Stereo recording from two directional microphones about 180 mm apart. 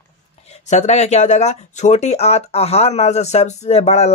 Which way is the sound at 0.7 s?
40° left (ahead or behind).